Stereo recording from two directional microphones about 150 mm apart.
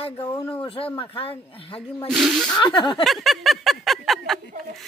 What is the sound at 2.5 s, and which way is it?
Speech, 30° left (ahead or behind).